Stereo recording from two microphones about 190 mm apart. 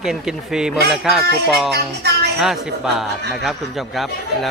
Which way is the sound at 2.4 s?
Centre (ahead or behind).